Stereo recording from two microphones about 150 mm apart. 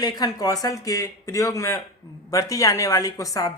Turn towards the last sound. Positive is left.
turn(degrees=25)  # may be behind; listen again after turning